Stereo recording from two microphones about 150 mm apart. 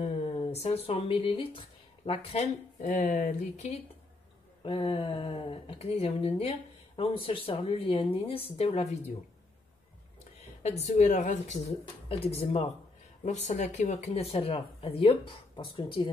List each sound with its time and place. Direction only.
0.0 s speech: 40° left (ahead or behind)
2.9 s speech: 60° left (ahead or behind)
4.6 s speech: 35° left (ahead or behind)
10.6 s speech: 50° left (ahead or behind)
12.1 s speech: 40° left (ahead or behind)
13.2 s speech: 50° left (ahead or behind); by 16.1 s 35° left (ahead or behind)